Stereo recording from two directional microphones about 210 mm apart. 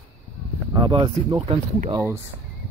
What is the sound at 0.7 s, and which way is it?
Speech, 20° right (ahead or behind).